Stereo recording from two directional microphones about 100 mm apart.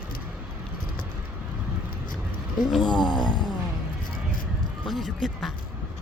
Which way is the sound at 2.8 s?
50° left (ahead or behind).